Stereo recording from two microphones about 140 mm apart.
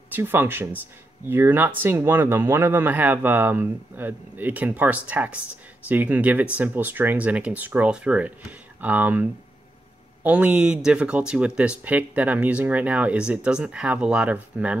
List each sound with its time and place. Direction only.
0.1 s speech: 15° right (ahead or behind)